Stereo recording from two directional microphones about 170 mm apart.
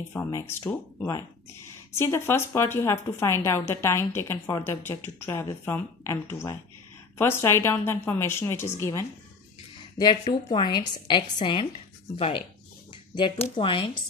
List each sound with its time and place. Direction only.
0.1 s a woman's voice: 15° left (ahead or behind)
10.2 s a woman's voice: 25° left (ahead or behind)